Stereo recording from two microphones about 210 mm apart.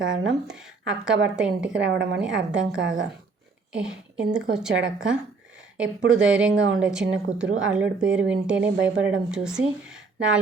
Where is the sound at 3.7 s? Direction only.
5° right (ahead or behind).